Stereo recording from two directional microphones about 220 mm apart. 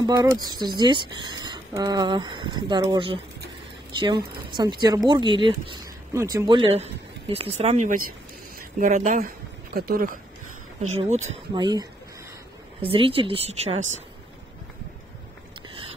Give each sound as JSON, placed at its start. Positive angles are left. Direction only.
{"t": 0.0, "sound": "speech", "side_deg": -15}
{"t": 4.5, "sound": "speech", "side_deg": -20}
{"t": 11.0, "sound": "speech", "side_deg": -30}
{"t": 11.5, "sound": "speech", "side_deg": -20}